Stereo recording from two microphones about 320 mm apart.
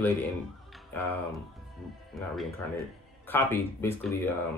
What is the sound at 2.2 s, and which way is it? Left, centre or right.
Speech, centre.